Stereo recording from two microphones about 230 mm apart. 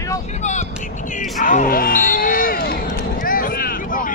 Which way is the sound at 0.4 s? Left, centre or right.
Left.